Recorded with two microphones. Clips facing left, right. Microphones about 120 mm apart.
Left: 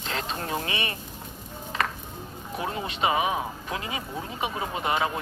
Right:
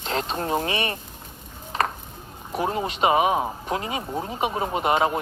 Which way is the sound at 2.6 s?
35° right (ahead or behind).